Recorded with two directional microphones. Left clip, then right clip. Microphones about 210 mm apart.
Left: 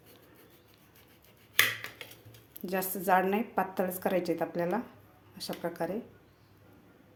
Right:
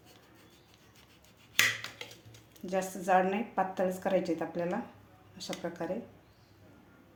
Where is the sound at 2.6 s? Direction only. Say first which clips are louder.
Even; 30° left (ahead or behind).